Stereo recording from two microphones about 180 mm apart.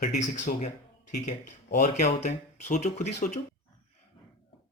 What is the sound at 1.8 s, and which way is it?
Speech, 40° left (ahead or behind).